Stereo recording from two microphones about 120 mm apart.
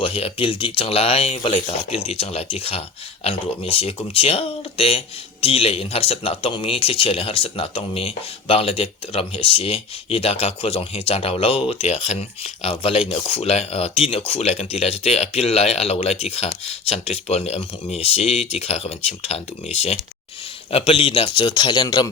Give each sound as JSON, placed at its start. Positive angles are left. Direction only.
{"t": 0.0, "sound": "speech", "side_deg": 50}